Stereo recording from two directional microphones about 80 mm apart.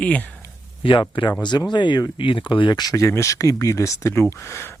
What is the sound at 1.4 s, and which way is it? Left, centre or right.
Speech, left.